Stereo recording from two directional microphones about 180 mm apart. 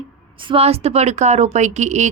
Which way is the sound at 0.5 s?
35° right (ahead or behind).